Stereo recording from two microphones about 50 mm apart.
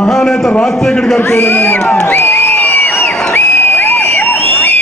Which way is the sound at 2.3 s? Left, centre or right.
Left.